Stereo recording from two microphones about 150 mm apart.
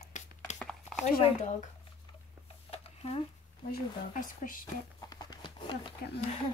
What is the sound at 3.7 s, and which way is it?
Speech, 65° left (ahead or behind).